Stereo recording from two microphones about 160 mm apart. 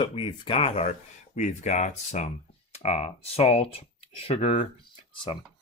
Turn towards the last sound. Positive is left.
turn(degrees=30)  # may be behind; listen again after turning